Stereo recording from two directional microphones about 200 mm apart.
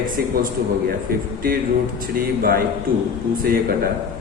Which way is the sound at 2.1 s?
45° right (ahead or behind).